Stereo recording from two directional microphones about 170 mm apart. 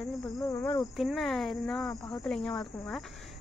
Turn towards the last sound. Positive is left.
turn(degrees=0)  # may be behind; listen again after turning